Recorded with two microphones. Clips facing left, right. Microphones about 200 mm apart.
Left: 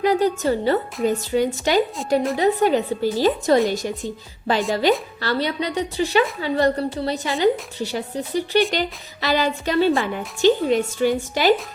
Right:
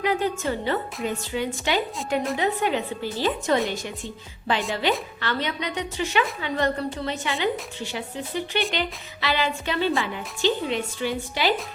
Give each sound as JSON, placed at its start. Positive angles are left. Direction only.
{"t": 0.0, "sound": "a woman's voice", "side_deg": 40}